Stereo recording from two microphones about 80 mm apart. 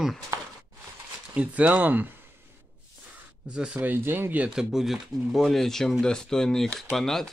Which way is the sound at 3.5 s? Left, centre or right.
Centre.